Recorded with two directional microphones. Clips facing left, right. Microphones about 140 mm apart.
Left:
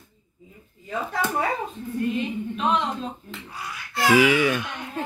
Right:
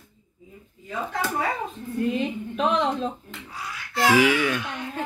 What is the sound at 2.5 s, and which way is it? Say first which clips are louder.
Speech: right 2 dB; 90° right.